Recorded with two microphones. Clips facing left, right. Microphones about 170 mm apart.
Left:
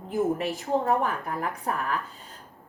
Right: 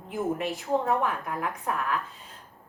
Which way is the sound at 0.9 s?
35° left (ahead or behind).